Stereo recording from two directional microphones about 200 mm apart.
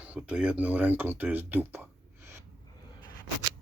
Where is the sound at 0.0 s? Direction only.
5° right (ahead or behind).